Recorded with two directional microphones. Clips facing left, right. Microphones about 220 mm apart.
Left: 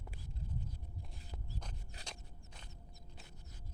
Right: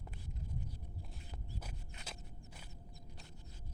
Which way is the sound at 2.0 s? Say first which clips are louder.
Right 1 dB; 5° right (ahead or behind).